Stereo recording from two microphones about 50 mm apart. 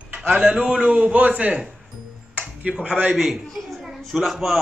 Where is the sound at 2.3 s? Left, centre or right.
Right.